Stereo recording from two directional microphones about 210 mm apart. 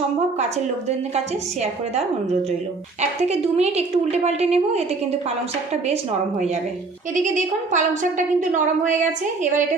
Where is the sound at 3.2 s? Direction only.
30° right (ahead or behind).